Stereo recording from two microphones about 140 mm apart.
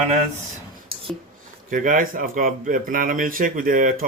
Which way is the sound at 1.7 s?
70° right (ahead or behind).